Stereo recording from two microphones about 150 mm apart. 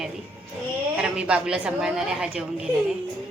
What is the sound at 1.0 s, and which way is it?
A woman's voice, 5° right (ahead or behind).